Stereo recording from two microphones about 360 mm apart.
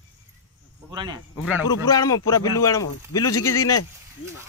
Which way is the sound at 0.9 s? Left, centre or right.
Centre.